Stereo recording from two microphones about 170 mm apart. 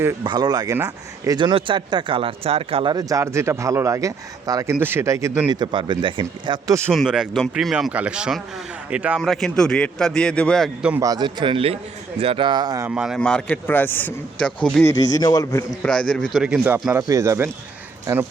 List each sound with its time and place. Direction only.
0.3 s speech: 25° right (ahead or behind)
6.9 s a man's voice: centre (ahead or behind)
11.0 s speech: 25° right (ahead or behind)
12.9 s a man's voice: 5° right (ahead or behind)
14.8 s a man's voice: 20° left (ahead or behind)
15.8 s speech: 5° left (ahead or behind); by 18.3 s 10° right (ahead or behind)